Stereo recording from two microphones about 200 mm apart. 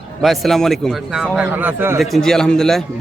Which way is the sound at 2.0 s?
Centre (ahead or behind).